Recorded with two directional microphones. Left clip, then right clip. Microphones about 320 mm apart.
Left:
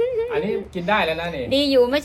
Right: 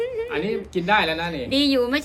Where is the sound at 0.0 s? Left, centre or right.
Centre.